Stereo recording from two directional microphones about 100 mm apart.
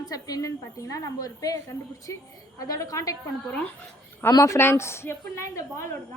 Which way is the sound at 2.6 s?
35° left (ahead or behind).